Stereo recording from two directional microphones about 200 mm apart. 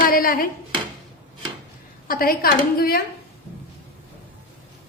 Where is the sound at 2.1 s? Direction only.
45° left (ahead or behind).